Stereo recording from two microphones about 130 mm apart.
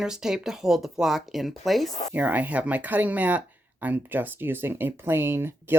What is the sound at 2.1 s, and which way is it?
Speech, 10° right (ahead or behind).